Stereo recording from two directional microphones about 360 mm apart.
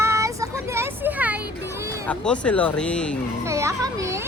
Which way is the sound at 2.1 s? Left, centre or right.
Centre.